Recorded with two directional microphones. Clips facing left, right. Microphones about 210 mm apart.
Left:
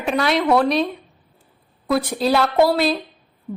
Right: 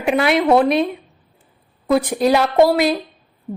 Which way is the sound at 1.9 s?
15° right (ahead or behind).